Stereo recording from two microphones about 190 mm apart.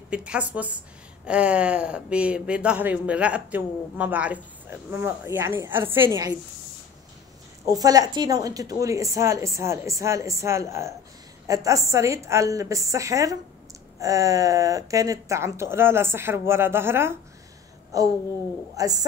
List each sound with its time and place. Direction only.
0.1 s speech: 5° right (ahead or behind)
7.6 s a woman's voice: 20° right (ahead or behind)